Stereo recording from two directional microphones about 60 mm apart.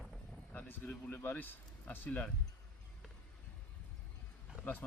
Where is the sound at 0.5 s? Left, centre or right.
Left.